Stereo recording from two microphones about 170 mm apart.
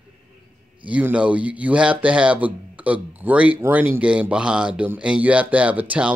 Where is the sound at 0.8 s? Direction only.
10° right (ahead or behind).